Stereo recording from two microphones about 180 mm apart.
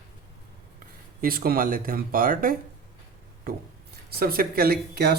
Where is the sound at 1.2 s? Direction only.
55° right (ahead or behind).